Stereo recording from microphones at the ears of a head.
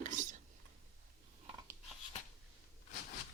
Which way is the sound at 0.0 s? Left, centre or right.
Right.